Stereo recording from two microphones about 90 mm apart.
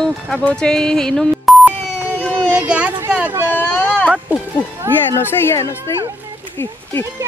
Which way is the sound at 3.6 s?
15° left (ahead or behind).